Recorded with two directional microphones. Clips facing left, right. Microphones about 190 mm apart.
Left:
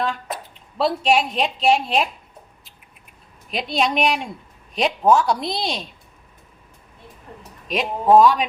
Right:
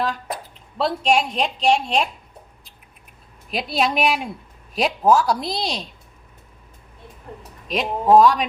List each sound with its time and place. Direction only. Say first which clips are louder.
0.0 s a sound: even; centre (ahead or behind)
0.8 s a woman's voice: left 1 dB; centre (ahead or behind)
3.5 s a woman's voice: even; centre (ahead or behind)
7.7 s a woman's voice: even; centre (ahead or behind)